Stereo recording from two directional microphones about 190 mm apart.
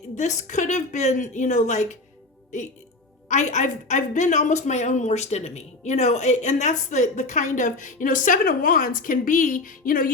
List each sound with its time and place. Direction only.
0.2 s a woman's voice: 40° left (ahead or behind)
3.2 s a woman's voice: 40° left (ahead or behind)